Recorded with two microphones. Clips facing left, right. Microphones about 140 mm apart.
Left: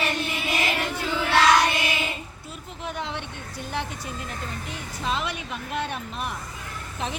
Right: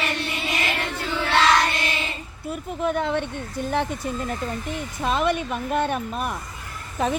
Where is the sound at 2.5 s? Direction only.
50° right (ahead or behind).